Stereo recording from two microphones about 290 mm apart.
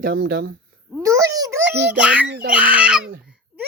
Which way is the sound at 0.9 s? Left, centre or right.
Centre.